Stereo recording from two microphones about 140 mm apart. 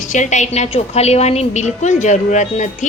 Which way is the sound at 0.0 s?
60° left (ahead or behind).